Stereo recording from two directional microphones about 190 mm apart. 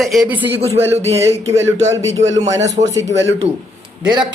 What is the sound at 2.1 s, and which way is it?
Speech, 90° right.